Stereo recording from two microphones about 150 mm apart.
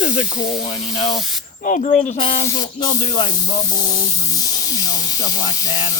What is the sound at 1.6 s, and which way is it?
Speech, 60° left (ahead or behind).